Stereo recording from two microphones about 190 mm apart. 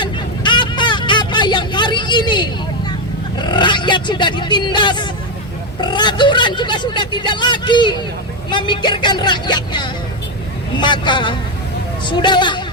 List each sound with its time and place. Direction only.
0.0 s vehicle: 25° left (ahead or behind)
3.3 s speech: 25° left (ahead or behind)